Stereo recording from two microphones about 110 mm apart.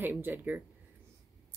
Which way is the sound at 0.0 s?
20° right (ahead or behind).